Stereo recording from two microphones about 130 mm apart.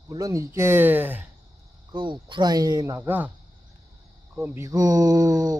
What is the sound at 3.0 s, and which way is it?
Speech, 15° right (ahead or behind).